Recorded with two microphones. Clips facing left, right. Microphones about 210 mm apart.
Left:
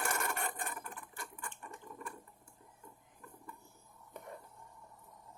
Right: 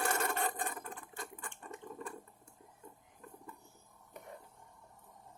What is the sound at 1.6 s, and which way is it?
Water, 25° right (ahead or behind).